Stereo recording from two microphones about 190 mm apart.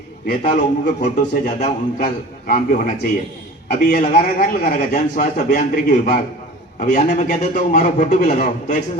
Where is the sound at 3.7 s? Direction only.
45° left (ahead or behind).